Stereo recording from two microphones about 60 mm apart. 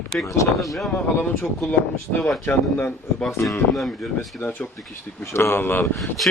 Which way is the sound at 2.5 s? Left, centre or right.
Left.